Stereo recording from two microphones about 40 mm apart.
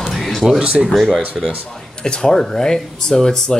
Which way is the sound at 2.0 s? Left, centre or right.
Centre.